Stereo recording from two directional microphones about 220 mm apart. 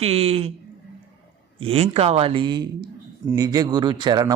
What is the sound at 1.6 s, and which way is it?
A man's voice, 25° right (ahead or behind).